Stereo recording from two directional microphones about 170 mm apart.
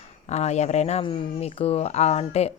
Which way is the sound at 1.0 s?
30° left (ahead or behind).